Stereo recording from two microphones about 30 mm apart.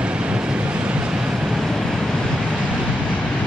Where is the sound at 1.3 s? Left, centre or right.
Centre.